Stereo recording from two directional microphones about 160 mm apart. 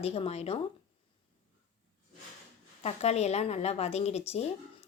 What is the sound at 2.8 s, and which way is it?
Speech, 40° left (ahead or behind).